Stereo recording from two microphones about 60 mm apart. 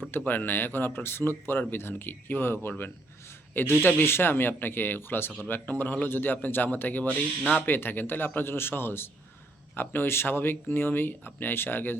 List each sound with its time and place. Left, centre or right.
0.3 s speech: left